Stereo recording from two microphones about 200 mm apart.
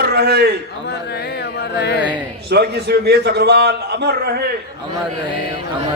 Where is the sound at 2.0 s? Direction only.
5° right (ahead or behind).